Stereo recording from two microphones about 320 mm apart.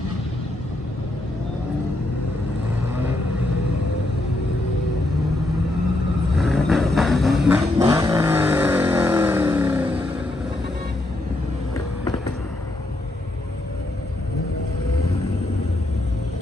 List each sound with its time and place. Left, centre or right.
6.3 s vehicle: centre